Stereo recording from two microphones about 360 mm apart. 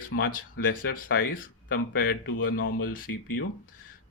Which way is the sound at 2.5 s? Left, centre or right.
Left.